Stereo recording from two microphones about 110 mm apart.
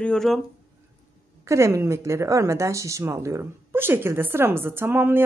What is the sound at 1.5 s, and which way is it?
Speech, 25° right (ahead or behind).